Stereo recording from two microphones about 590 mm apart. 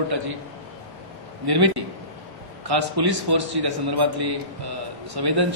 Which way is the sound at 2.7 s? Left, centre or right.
Right.